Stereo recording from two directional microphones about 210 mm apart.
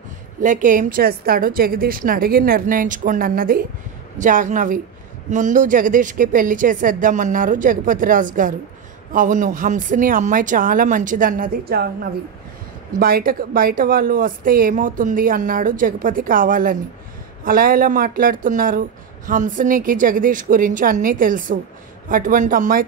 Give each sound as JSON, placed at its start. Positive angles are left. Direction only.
{"t": 0.4, "sound": "a woman's voice", "side_deg": -35}